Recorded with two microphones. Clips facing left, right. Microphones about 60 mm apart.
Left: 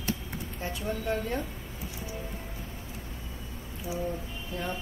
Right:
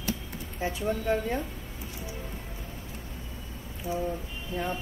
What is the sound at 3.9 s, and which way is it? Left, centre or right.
Speech, centre.